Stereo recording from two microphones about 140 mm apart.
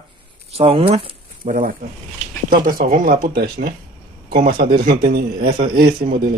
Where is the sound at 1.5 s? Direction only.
70° right (ahead or behind).